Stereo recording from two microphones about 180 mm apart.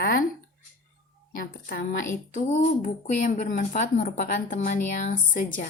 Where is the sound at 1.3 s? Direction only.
55° left (ahead or behind).